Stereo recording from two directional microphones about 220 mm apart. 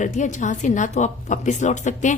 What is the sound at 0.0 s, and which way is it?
Speech, 35° left (ahead or behind).